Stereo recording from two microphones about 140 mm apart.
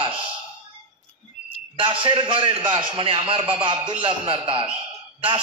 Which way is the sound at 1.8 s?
35° right (ahead or behind).